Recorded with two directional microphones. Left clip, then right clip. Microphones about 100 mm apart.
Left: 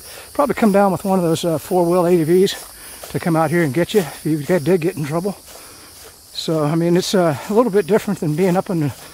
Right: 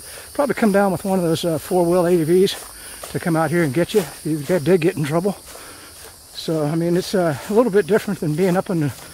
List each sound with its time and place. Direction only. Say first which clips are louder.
0.4 s speech: left 2 dB; 35° left (ahead or behind)
1.5 s speech: left 1 dB; 15° left (ahead or behind)
2.0 s speech: left 2 dB; 35° left (ahead or behind)
4.7 s speech: right 1 dB; centre (ahead or behind)
6.3 s speech: left 3 dB; 50° left (ahead or behind); by 7.2 s 75° left (ahead or behind)
7.4 s speech: left 1 dB; 25° left (ahead or behind)